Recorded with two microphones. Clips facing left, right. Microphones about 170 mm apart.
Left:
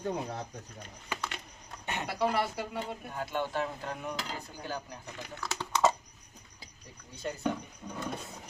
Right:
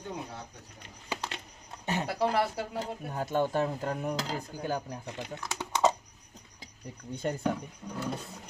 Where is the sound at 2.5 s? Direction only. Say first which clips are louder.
Right 2 dB; 35° right (ahead or behind).